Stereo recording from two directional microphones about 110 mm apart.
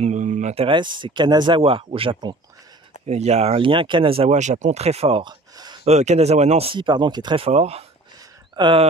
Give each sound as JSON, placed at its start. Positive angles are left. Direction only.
{"t": 0.0, "sound": "a sound", "side_deg": -90}
{"t": 0.7, "sound": "speech", "side_deg": -45}
{"t": 1.6, "sound": "speech", "side_deg": -55}
{"t": 3.1, "sound": "speech", "side_deg": -85}
{"t": 5.2, "sound": "a sound", "side_deg": -40}
{"t": 5.9, "sound": "speech", "side_deg": -85}
{"t": 7.4, "sound": "speech", "side_deg": -65}
{"t": 8.5, "sound": "speech", "side_deg": -45}